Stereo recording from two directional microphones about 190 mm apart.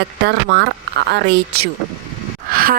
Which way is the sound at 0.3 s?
60° right (ahead or behind).